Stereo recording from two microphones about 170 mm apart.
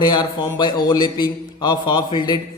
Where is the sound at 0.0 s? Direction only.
25° left (ahead or behind).